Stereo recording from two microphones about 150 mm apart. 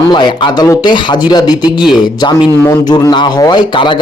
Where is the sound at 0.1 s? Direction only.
30° left (ahead or behind).